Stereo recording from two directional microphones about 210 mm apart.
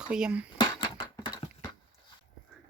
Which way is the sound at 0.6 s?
20° left (ahead or behind).